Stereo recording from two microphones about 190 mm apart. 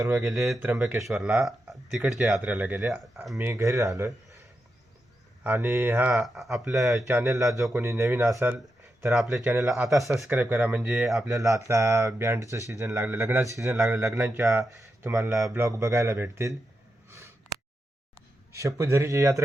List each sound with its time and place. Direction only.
0.1 s speech: centre (ahead or behind); by 4.4 s 15° right (ahead or behind)
5.4 s speech: 10° right (ahead or behind)
7.1 s speech: 15° right (ahead or behind)
11.3 s speech: 15° right (ahead or behind)
17.1 s a sound: 15° right (ahead or behind)
18.5 s speech: 15° right (ahead or behind)